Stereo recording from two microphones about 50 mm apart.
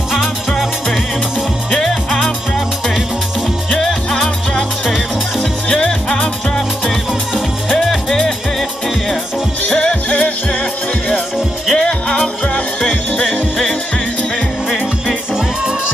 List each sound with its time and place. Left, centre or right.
1.7 s music: centre
3.7 s music: centre
6.9 s music: centre
9.7 s music: centre
10.0 s music: left
11.7 s music: centre
13.3 s music: centre